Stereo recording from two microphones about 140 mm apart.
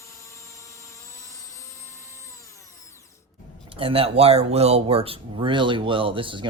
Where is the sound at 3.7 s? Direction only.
40° right (ahead or behind).